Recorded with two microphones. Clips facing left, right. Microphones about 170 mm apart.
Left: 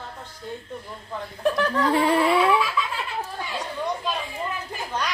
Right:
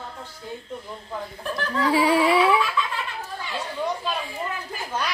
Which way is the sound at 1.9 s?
5° right (ahead or behind).